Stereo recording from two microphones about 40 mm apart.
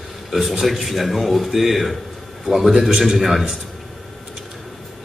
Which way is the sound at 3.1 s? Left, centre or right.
Centre.